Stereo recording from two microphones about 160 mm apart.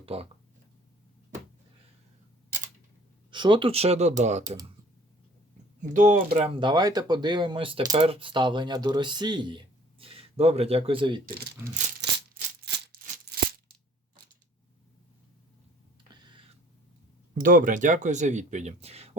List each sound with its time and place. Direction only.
0.0 s speech: 40° right (ahead or behind)
3.3 s speech: 30° right (ahead or behind); by 4.5 s 45° right (ahead or behind)
5.9 s speech: 50° right (ahead or behind)
6.6 s speech: 25° right (ahead or behind)
11.3 s speech: 75° right (ahead or behind)
12.6 s music: 90° right
13.2 s music: 70° right (ahead or behind)
17.3 s speech: 60° right (ahead or behind); by 19.1 s 40° right (ahead or behind)